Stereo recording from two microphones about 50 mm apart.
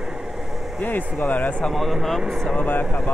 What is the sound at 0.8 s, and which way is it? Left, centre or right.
Speech, left.